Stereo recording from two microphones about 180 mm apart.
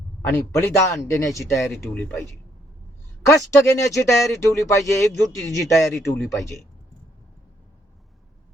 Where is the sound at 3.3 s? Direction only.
15° left (ahead or behind).